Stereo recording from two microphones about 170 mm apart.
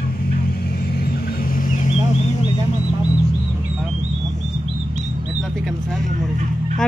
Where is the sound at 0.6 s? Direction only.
70° left (ahead or behind).